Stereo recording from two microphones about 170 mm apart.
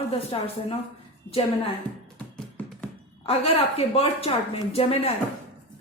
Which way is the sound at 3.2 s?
35° left (ahead or behind).